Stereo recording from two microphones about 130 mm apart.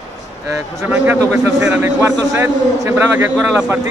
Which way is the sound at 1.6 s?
10° right (ahead or behind).